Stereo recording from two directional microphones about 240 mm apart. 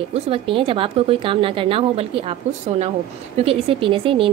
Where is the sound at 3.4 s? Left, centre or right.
Right.